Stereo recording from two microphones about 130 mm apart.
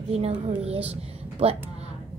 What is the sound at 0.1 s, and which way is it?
Speech, 50° right (ahead or behind).